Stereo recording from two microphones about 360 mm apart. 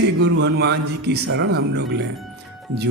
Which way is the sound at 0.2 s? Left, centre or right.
Right.